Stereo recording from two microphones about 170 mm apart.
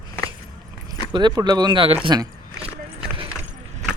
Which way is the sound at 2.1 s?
25° right (ahead or behind).